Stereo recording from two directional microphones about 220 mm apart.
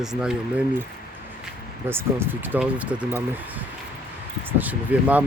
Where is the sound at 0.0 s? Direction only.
Centre (ahead or behind).